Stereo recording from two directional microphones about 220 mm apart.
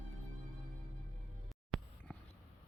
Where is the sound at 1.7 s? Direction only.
Centre (ahead or behind).